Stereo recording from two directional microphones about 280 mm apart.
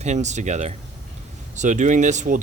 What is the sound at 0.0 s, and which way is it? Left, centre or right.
Speech, right.